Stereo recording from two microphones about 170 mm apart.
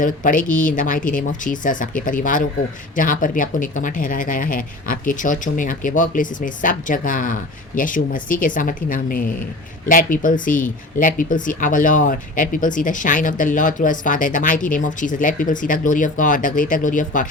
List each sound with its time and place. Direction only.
0.0 s speech: 50° left (ahead or behind)